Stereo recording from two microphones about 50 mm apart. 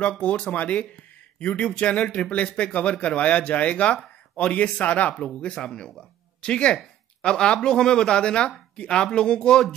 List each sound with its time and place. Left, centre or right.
0.2 s a man's voice: left
5.5 s speech: centre